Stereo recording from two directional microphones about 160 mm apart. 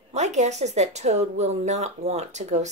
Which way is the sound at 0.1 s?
45° right (ahead or behind).